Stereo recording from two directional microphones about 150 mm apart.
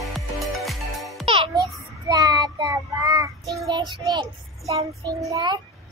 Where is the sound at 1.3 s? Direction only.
35° right (ahead or behind).